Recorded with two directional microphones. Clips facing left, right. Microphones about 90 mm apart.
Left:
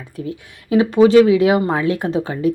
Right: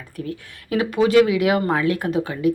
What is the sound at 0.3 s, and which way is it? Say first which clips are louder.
Speech: left 6 dB; 25° left (ahead or behind).